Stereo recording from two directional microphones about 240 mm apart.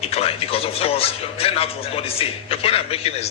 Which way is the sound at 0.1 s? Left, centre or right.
Left.